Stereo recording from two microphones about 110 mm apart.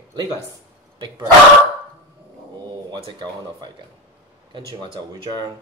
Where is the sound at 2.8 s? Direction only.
50° right (ahead or behind).